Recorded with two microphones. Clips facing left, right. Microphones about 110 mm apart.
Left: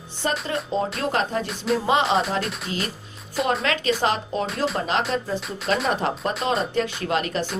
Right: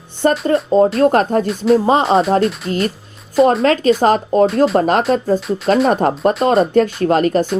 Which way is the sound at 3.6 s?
40° right (ahead or behind).